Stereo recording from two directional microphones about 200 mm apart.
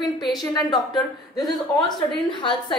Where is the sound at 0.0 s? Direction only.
20° left (ahead or behind).